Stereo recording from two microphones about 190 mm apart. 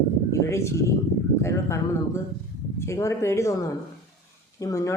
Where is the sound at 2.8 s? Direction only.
15° left (ahead or behind).